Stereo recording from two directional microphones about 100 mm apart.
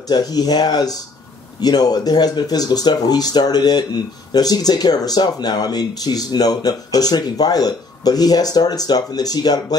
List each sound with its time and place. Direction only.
0.1 s speech: 40° left (ahead or behind)